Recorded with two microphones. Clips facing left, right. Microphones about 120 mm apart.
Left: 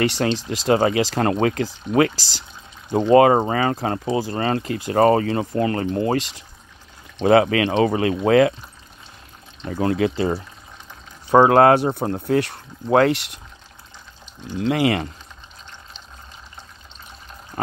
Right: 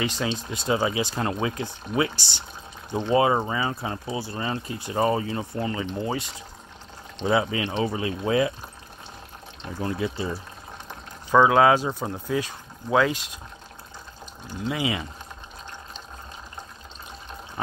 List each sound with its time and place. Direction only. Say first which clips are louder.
0.0 s speech: left 7 dB; 70° left (ahead or behind)
2.9 s speech: left 8 dB; 60° left (ahead or behind)
9.7 s speech: left 8 dB; 75° left (ahead or behind)
11.2 s speech: left 5 dB; 55° left (ahead or behind); by 13.4 s 70° left (ahead or behind)
14.6 s speech: left 8 dB; 65° left (ahead or behind)